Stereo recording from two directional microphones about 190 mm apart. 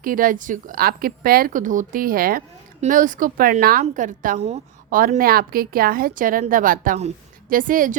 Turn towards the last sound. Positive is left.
turn(degrees=-45)  # may be behind; listen again after turning